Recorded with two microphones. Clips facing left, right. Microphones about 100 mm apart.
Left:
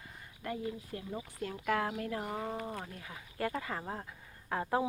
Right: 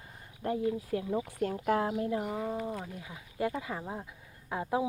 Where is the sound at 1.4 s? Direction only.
35° right (ahead or behind); by 2.4 s 15° right (ahead or behind).